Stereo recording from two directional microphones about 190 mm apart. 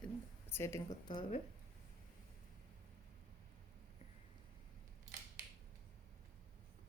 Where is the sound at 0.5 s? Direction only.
15° left (ahead or behind).